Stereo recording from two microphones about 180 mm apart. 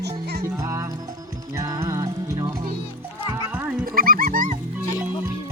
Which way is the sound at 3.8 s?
55° right (ahead or behind).